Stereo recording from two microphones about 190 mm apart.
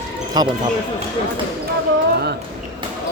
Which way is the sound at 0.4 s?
20° right (ahead or behind).